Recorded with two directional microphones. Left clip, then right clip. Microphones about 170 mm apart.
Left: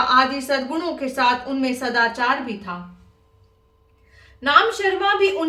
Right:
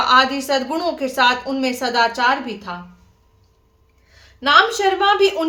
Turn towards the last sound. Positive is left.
turn(degrees=-20)  # may be behind; listen again after turning